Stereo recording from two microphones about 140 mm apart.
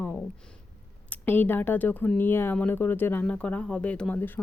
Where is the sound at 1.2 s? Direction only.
15° left (ahead or behind).